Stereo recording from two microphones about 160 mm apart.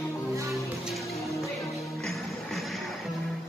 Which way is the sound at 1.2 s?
20° left (ahead or behind).